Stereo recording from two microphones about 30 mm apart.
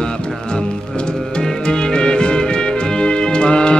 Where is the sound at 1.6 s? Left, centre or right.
Left.